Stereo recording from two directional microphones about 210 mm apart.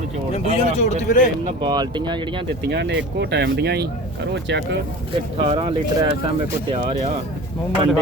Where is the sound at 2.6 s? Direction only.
55° right (ahead or behind).